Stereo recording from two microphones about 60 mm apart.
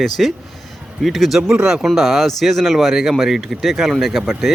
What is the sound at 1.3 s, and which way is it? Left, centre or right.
Speech, centre.